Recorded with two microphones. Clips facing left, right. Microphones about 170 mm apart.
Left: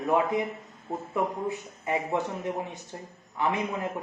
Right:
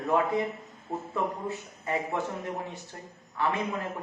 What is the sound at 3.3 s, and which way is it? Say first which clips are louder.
Speech: left 1 dB; 15° left (ahead or behind).